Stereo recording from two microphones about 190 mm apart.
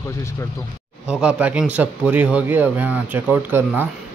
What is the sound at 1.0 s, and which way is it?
Speech, 5° right (ahead or behind).